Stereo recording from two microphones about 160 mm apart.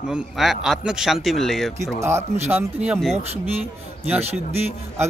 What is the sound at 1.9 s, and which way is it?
Speech, 15° right (ahead or behind).